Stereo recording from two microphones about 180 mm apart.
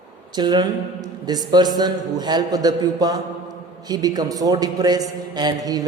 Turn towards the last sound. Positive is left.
turn(degrees=-20)  # may be behind; listen again after turning